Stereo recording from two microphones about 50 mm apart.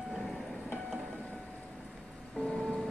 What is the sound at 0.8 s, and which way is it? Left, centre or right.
Train, right.